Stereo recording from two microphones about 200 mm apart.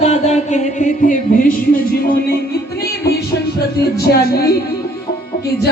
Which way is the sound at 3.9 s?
50° left (ahead or behind).